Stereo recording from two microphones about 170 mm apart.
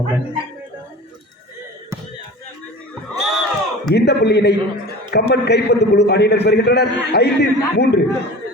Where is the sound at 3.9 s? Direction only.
80° left.